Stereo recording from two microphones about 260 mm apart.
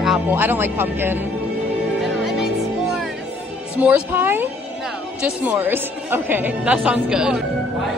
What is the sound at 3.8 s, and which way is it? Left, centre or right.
A woman's voice, centre.